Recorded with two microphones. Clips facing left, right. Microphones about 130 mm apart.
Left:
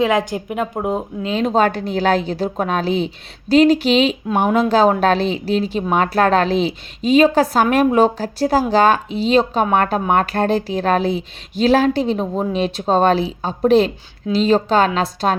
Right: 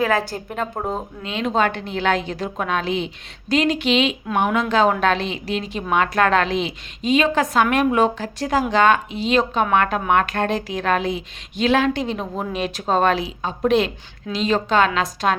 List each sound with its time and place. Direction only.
0.0 s speech: 15° left (ahead or behind)
1.2 s speech: 40° left (ahead or behind)